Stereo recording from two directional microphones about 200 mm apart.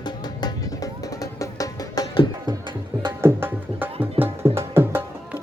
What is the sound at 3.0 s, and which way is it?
Music, 15° right (ahead or behind).